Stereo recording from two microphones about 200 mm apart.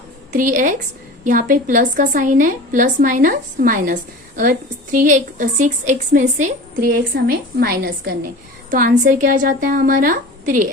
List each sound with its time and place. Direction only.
0.3 s a woman's voice: 40° right (ahead or behind)